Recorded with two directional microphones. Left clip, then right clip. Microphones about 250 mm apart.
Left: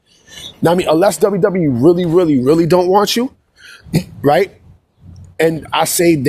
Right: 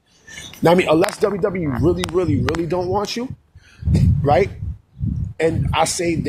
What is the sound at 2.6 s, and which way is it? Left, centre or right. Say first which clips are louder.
Speech: left 10 dB; left.